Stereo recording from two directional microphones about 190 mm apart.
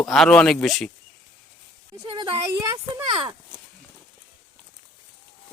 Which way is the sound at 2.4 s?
15° right (ahead or behind).